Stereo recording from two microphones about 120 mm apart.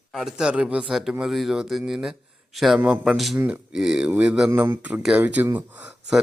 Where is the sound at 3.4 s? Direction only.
15° right (ahead or behind).